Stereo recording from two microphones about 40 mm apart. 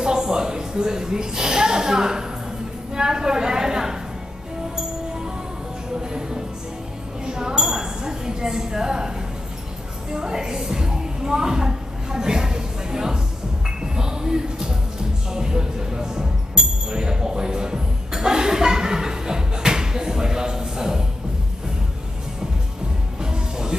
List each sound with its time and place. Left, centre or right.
0.0 s a woman's voice: centre
7.2 s a sound: centre
10.1 s music: centre
13.7 s a sound: centre
15.3 s music: centre
16.9 s chuckle: centre
23.2 s music: centre